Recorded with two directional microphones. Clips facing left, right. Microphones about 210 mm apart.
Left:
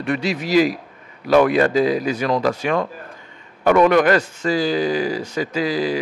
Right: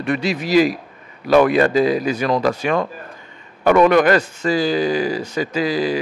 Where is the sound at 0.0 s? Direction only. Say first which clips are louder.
Right 1 dB; 10° right (ahead or behind).